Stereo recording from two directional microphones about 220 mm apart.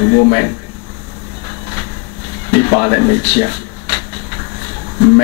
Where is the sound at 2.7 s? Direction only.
25° left (ahead or behind).